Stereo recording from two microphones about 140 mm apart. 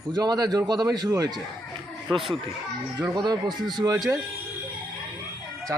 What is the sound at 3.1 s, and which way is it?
Speech, 30° right (ahead or behind).